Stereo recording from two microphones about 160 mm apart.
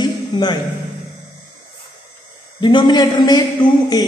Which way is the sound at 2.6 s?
30° left (ahead or behind).